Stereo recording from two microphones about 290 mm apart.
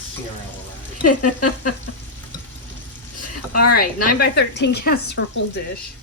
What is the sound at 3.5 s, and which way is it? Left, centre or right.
Speech, left.